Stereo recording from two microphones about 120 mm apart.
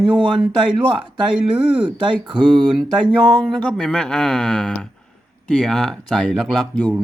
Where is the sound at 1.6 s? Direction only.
10° right (ahead or behind).